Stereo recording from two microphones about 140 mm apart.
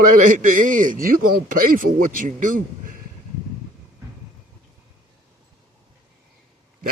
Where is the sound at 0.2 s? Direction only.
70° right (ahead or behind).